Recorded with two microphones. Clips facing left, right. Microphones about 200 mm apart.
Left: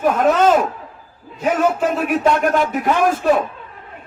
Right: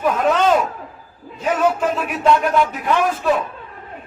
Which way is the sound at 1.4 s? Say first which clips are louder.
Left 1 dB; 50° left (ahead or behind).